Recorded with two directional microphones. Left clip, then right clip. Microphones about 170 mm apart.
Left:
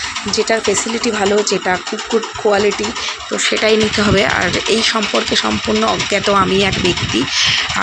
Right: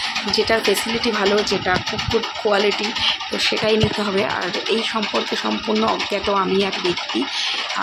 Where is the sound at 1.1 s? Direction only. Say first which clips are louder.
Left 4 dB; 25° left (ahead or behind).